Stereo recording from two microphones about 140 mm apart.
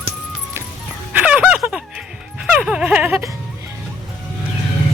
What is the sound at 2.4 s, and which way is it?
Speech, 5° right (ahead or behind).